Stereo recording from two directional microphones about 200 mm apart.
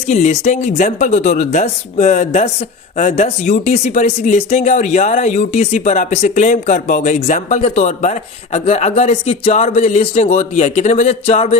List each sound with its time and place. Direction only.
0.1 s speech: 35° left (ahead or behind)